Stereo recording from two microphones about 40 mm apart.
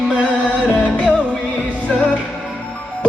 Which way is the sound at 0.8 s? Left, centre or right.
Left.